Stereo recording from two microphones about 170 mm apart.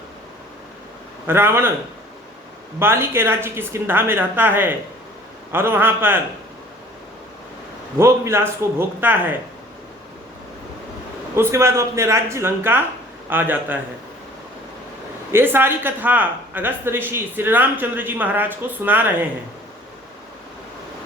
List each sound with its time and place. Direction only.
1.3 s speech: 15° right (ahead or behind)
2.7 s speech: 15° right (ahead or behind)
7.9 s speech: 15° right (ahead or behind)
11.3 s speech: 15° right (ahead or behind)
15.3 s speech: 15° right (ahead or behind)